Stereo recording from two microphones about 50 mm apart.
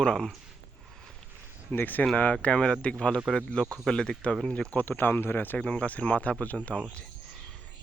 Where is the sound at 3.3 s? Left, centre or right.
Centre.